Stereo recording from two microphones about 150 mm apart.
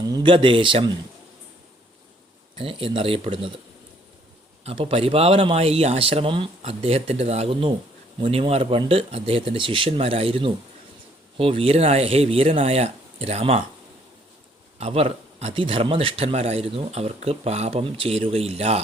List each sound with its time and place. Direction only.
0.0 s speech: 30° right (ahead or behind)
2.6 s speech: 35° right (ahead or behind)
4.6 s speech: 40° right (ahead or behind)
14.8 s a man's voice: 40° right (ahead or behind)